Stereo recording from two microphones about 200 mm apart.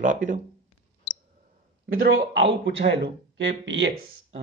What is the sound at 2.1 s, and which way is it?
Speech, 65° right (ahead or behind).